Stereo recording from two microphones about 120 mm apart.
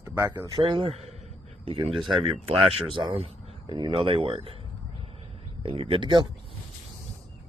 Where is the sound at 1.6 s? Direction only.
50° right (ahead or behind).